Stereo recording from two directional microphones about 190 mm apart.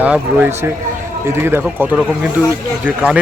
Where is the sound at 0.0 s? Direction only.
10° right (ahead or behind).